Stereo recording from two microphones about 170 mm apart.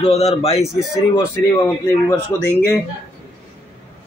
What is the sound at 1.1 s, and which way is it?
Speech, 20° left (ahead or behind).